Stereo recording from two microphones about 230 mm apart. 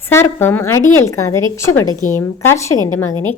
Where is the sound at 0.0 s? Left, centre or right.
Centre.